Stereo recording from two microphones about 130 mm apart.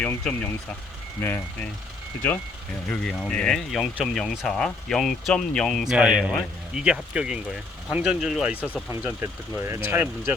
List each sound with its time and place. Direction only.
0.0 s speech: 15° left (ahead or behind)
2.9 s speech: 5° left (ahead or behind)
9.2 s speech: 20° right (ahead or behind)